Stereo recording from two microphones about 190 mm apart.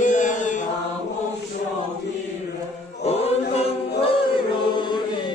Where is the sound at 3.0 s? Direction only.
35° left (ahead or behind).